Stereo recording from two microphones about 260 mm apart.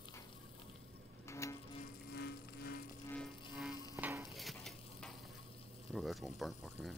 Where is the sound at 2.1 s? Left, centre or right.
Left.